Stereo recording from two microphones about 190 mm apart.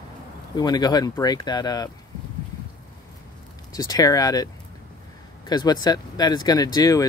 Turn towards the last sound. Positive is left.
turn(degrees=20)  # may be behind; listen again after turning